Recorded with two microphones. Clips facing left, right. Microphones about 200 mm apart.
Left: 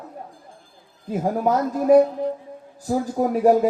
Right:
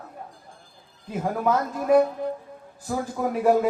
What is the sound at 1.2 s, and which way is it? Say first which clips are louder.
A woman's voice: left 3 dB; 40° left (ahead or behind).